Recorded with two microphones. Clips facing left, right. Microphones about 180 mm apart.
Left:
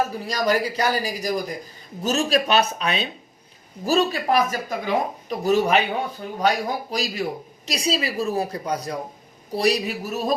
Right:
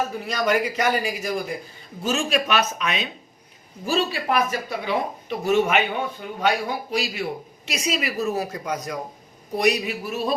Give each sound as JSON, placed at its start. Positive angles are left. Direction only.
{"t": 0.3, "sound": "speech", "side_deg": 35}
{"t": 3.8, "sound": "speech", "side_deg": 45}